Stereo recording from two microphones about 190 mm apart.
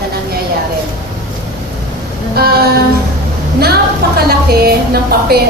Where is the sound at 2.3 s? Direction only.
55° right (ahead or behind).